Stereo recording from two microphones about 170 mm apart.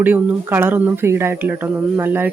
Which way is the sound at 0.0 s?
10° right (ahead or behind).